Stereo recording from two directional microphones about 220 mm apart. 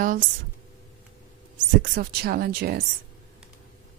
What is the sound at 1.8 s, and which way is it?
Speech, 45° right (ahead or behind).